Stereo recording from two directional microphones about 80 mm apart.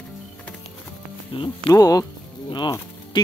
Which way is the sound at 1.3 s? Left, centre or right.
Left.